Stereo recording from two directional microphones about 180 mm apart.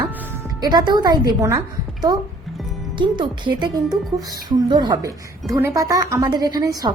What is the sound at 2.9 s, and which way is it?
A woman's voice, 25° right (ahead or behind).